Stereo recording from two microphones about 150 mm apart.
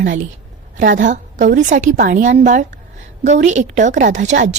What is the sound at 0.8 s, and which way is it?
A woman's voice, 60° right (ahead or behind).